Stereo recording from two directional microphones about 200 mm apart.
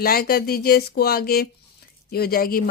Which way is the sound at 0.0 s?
50° left (ahead or behind).